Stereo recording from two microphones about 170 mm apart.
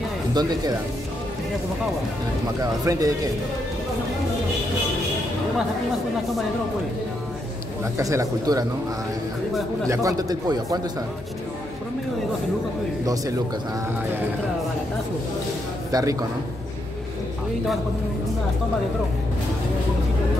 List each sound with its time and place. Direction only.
0.3 s speech: 25° right (ahead or behind)
2.6 s speech: 20° right (ahead or behind)
7.8 s speech: 20° right (ahead or behind)
9.8 s speech: 20° right (ahead or behind)
15.9 s speech: 20° right (ahead or behind)